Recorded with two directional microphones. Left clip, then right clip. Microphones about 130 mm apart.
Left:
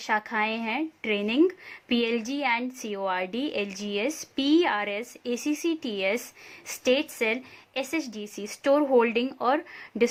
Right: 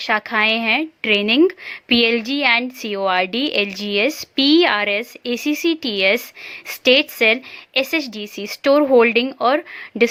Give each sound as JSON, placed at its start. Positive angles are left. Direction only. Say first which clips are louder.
{"t": 0.0, "sound": "speech", "louder": "right 9 dB", "side_deg": -25}